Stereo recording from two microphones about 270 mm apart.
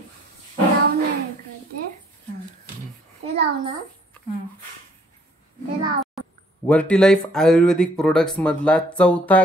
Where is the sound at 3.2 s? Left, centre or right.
Right.